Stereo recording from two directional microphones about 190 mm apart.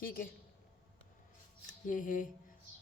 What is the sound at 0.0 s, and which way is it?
Speech, 50° left (ahead or behind).